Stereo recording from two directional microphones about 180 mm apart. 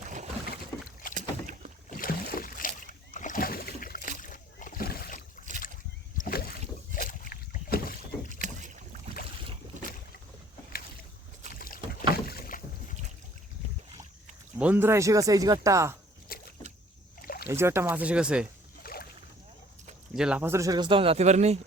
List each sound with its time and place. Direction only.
1.1 s rowboat: 45° right (ahead or behind)
1.9 s boat: 50° left (ahead or behind)
8.4 s rowboat: 45° right (ahead or behind)
11.6 s boat: 55° left (ahead or behind)
14.6 s speech: 10° right (ahead or behind)
16.3 s boat: 55° left (ahead or behind)
17.2 s rowboat: 55° left (ahead or behind)
17.5 s speech: 15° right (ahead or behind)
18.8 s boat: 55° left (ahead or behind)
20.1 s speech: 5° right (ahead or behind); by 21.6 s 40° right (ahead or behind)